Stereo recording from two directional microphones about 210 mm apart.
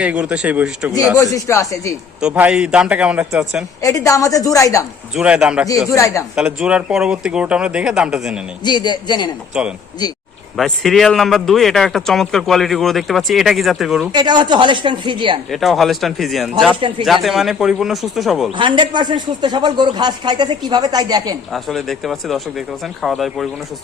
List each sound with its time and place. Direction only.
0.0 s a man's voice: 5° right (ahead or behind)
1.1 s a woman's voice: 15° left (ahead or behind)
2.2 s a man's voice: 5° right (ahead or behind)
3.8 s a woman's voice: 15° left (ahead or behind)
5.1 s a man's voice: 5° right (ahead or behind)
5.9 s a woman's voice: 15° left (ahead or behind)
6.3 s a man's voice: 5° right (ahead or behind)
8.6 s a man's voice: 20° left (ahead or behind)
9.5 s a man's voice: 5° right (ahead or behind)
14.1 s speech: 20° right (ahead or behind)
15.4 s a man's voice: centre (ahead or behind)
18.5 s speech: 20° right (ahead or behind)
21.5 s a man's voice: centre (ahead or behind)